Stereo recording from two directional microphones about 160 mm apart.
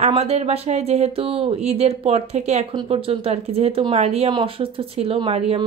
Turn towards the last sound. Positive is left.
turn(degrees=-40)  # may be behind; listen again after turning